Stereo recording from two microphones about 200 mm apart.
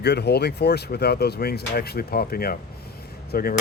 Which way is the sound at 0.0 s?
55° left (ahead or behind).